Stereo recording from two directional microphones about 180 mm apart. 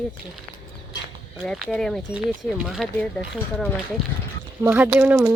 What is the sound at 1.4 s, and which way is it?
Speech, centre (ahead or behind).